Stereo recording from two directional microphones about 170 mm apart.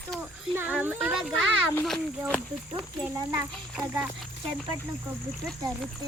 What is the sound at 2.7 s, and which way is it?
Speech, 20° right (ahead or behind).